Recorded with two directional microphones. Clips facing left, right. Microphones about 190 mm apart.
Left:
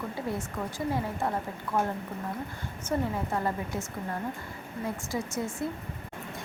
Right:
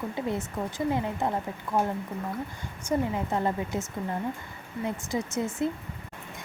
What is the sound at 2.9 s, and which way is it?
Speech, 15° right (ahead or behind).